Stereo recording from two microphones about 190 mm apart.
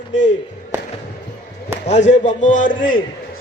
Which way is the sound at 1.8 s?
35° left (ahead or behind).